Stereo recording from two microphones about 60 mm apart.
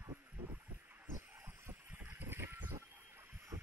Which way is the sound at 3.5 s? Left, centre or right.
Right.